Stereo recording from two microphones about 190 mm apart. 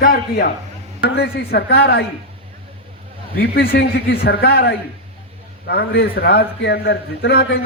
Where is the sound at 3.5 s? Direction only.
55° left (ahead or behind).